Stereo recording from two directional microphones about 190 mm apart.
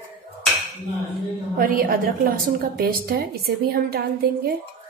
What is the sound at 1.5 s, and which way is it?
A woman's voice, 50° right (ahead or behind).